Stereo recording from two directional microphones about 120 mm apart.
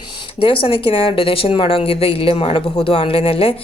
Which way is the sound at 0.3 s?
45° left (ahead or behind).